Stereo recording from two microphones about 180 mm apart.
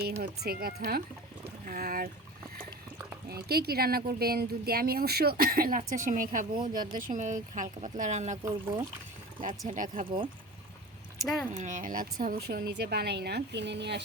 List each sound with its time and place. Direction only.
0.2 s speech: 60° right (ahead or behind)
3.2 s speech: 60° right (ahead or behind)
11.5 s speech: 45° right (ahead or behind); by 14.0 s 70° right (ahead or behind)